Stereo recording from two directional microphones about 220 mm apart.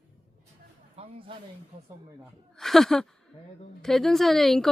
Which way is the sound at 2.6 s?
Centre (ahead or behind).